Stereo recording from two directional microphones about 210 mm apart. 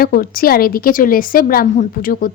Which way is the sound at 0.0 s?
45° left (ahead or behind).